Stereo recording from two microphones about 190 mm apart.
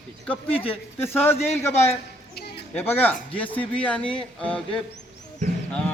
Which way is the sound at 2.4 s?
60° left (ahead or behind).